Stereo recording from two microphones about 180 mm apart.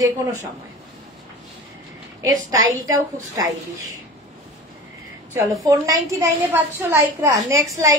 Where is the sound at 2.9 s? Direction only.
20° right (ahead or behind).